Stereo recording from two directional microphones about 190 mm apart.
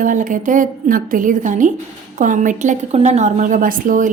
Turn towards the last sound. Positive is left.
turn(degrees=-45)  # may be behind; listen again after turning